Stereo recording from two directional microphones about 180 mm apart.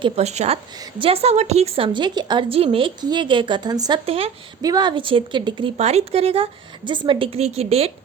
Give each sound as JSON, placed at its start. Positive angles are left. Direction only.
{"t": 0.0, "sound": "a woman's voice", "side_deg": -35}
{"t": 4.6, "sound": "a woman's voice", "side_deg": -20}